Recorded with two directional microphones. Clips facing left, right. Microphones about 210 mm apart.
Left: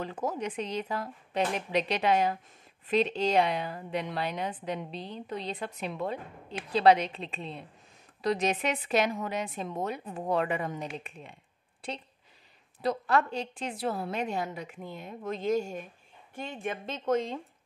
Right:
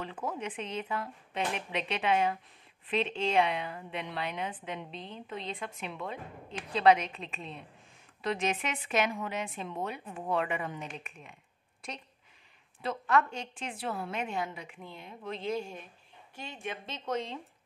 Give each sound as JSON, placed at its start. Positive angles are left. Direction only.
{"t": 0.0, "sound": "a woman's voice", "side_deg": 40}